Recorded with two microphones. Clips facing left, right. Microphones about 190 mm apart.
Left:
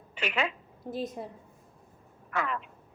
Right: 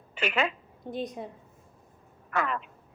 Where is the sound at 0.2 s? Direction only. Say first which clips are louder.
Right 3 dB; 50° right (ahead or behind).